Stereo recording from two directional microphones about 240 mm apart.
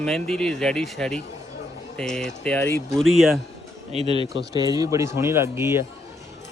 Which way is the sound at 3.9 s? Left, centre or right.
Right.